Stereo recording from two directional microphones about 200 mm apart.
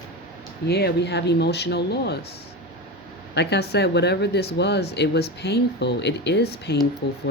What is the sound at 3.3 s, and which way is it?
Speech, 55° left (ahead or behind).